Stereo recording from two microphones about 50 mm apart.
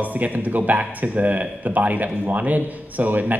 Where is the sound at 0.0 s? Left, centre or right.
Right.